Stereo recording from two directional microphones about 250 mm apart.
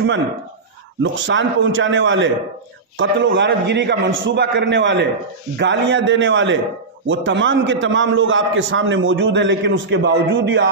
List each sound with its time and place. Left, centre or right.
1.0 s a man's voice: right